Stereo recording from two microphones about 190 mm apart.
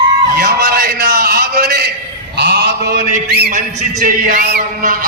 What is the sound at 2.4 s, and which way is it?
Mantra, 60° right (ahead or behind).